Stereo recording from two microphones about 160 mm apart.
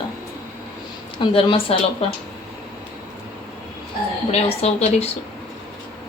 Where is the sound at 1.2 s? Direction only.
30° left (ahead or behind).